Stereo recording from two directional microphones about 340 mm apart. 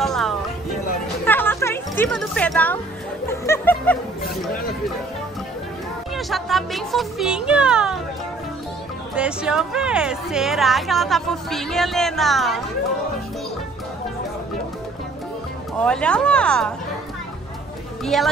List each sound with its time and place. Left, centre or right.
0.0 s music: centre
6.1 s a woman's voice: centre
9.1 s a woman's voice: centre
15.8 s a woman's voice: centre
18.0 s a woman's voice: centre